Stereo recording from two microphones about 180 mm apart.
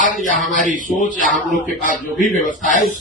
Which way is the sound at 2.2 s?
45° left (ahead or behind).